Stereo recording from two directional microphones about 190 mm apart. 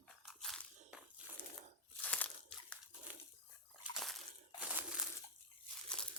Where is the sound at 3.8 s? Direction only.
Centre (ahead or behind).